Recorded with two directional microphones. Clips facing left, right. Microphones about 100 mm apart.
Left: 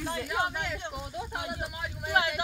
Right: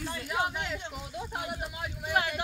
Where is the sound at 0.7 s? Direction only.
5° left (ahead or behind).